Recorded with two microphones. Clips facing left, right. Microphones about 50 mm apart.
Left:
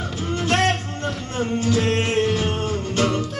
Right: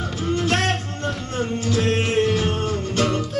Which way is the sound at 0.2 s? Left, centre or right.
Centre.